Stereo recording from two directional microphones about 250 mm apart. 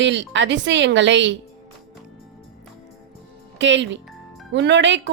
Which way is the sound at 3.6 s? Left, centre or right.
Right.